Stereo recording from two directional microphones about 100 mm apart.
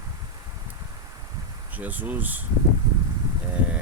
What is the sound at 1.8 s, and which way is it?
Speech, 15° right (ahead or behind).